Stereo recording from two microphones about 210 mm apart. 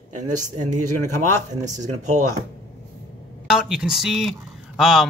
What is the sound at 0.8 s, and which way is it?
Speech, 90° right.